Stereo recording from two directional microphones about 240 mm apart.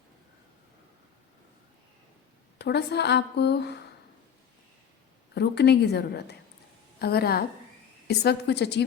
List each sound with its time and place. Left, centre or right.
2.6 s a woman's voice: left
5.3 s a woman's voice: left